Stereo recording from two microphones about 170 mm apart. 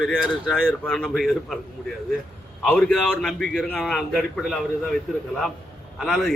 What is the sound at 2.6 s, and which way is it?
A man's voice, 5° left (ahead or behind).